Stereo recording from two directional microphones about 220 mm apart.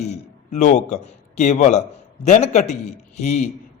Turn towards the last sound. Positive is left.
turn(degrees=30)  # may be behind; listen again after turning